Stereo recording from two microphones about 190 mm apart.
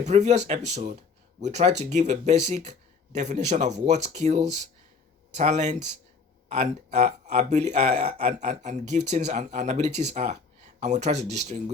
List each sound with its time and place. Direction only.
0.0 s speech: 40° right (ahead or behind)